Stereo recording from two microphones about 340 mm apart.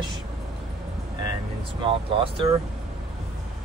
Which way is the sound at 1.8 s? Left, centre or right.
Centre.